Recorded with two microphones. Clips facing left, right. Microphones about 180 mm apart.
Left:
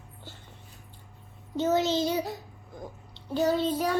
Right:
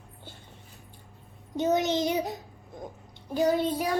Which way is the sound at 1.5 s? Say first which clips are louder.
Even; 15° right (ahead or behind).